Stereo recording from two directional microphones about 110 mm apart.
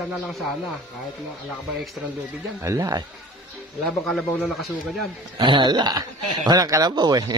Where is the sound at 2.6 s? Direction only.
30° right (ahead or behind).